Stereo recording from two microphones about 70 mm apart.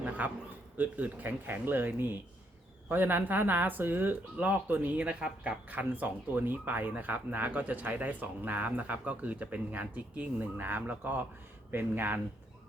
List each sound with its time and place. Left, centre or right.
0.2 s speech: right